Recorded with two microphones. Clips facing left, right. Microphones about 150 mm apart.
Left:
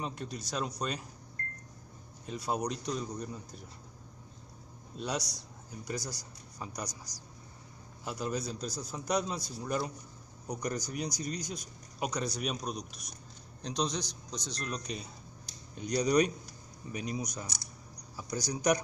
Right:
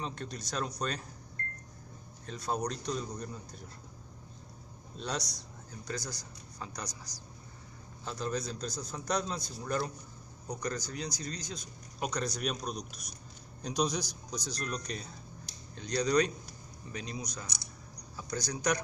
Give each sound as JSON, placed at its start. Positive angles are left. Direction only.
{"t": 0.0, "sound": "a man's voice", "side_deg": 5}
{"t": 2.2, "sound": "a man's voice", "side_deg": 5}
{"t": 4.9, "sound": "a man's voice", "side_deg": 5}
{"t": 8.0, "sound": "a man's voice", "side_deg": 10}